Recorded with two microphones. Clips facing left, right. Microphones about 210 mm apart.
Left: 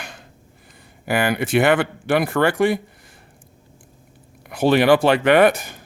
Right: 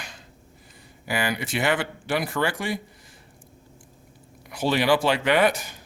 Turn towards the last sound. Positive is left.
turn(degrees=55)  # may be behind; listen again after turning